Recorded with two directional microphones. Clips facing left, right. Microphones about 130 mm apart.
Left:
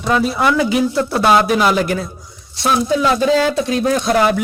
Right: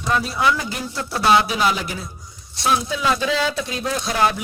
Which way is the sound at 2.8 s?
45° left (ahead or behind).